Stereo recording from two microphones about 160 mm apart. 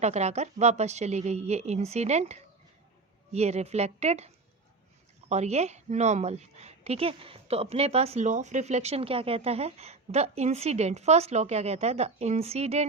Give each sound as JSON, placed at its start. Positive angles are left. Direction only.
{"t": 0.0, "sound": "a woman's voice", "side_deg": -45}
{"t": 5.3, "sound": "a woman's voice", "side_deg": -45}